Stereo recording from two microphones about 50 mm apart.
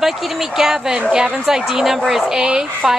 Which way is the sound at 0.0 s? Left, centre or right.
Centre.